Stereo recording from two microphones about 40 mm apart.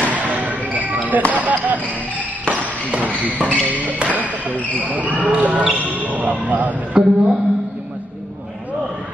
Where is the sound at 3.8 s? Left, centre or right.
Right.